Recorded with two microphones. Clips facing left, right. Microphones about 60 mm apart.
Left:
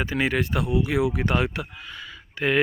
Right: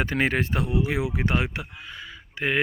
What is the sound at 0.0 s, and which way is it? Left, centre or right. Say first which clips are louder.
Speech: right 1 dB; right.